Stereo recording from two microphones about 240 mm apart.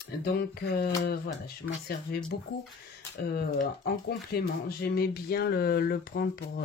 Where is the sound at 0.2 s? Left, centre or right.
Left.